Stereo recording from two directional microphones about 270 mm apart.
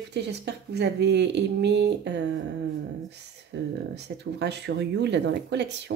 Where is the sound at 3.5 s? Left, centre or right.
Right.